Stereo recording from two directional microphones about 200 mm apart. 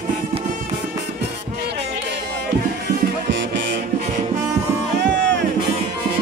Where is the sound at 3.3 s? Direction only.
60° right (ahead or behind).